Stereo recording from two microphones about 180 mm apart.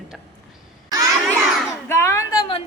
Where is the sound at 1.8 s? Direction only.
15° left (ahead or behind).